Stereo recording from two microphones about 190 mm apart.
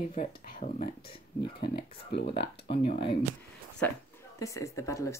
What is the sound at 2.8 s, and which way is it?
Speech, 30° left (ahead or behind).